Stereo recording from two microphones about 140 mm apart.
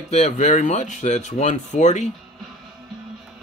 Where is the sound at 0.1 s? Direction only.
55° left (ahead or behind).